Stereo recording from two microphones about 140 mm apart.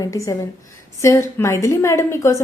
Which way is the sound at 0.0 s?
25° left (ahead or behind).